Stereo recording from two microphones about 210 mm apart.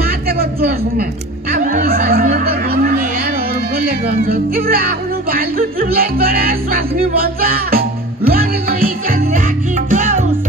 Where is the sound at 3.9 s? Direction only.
45° right (ahead or behind).